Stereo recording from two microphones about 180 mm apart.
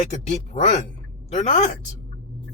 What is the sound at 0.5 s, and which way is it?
Speech, 40° left (ahead or behind).